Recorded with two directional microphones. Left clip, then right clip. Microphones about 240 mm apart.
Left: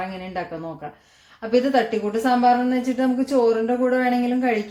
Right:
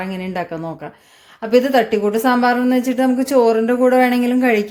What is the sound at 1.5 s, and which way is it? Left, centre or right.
A woman's voice, right.